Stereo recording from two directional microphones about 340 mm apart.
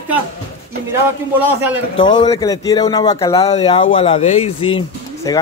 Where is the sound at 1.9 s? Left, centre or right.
Centre.